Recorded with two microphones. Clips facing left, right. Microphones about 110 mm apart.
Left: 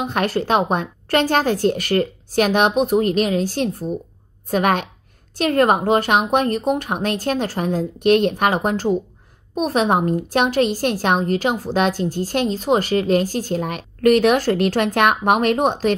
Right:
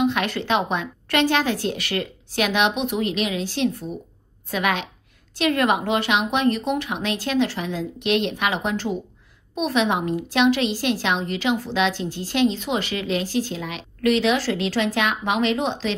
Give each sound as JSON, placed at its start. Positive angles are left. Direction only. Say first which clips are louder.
{"t": 0.0, "sound": "a woman's voice", "louder": "left 1 dB", "side_deg": 40}